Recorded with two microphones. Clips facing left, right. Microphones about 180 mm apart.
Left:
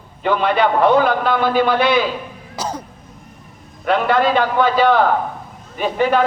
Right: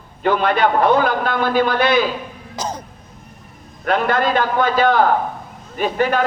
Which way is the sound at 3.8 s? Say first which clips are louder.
Left 2 dB; 45° right (ahead or behind).